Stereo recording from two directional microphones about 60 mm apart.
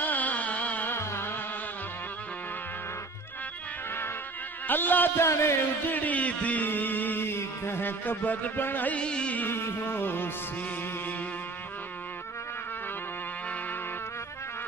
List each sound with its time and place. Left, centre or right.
0.0 s music: left
0.9 s music: left
4.6 s music: left
5.2 s a man's voice: left
5.9 s music: left
8.9 s music: centre
9.5 s music: left